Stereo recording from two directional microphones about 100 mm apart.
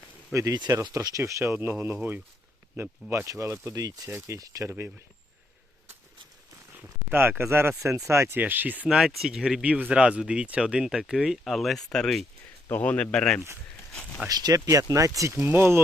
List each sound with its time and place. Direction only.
0.3 s speech: 40° right (ahead or behind)
6.8 s speech: 20° right (ahead or behind); by 13.4 s 5° left (ahead or behind)
14.3 s speech: 40° right (ahead or behind); by 15.8 s 25° right (ahead or behind)